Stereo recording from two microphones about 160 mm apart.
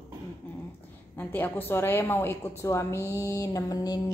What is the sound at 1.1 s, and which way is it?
A woman's voice, 10° left (ahead or behind).